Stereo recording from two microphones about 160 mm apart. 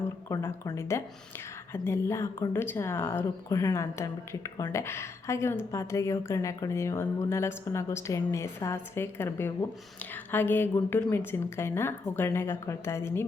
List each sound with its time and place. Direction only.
0.3 s speech: 15° left (ahead or behind)